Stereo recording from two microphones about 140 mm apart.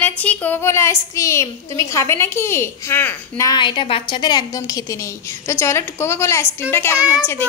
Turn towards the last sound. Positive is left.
turn(degrees=-10)  # may be behind; listen again after turning